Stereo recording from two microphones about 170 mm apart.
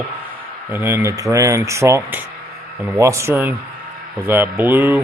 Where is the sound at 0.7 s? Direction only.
15° right (ahead or behind).